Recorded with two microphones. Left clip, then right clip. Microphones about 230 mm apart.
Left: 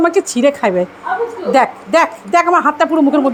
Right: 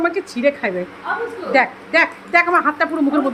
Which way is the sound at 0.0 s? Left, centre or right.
Left.